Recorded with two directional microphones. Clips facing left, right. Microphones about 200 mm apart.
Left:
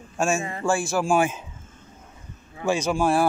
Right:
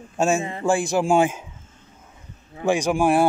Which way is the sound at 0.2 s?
20° right (ahead or behind).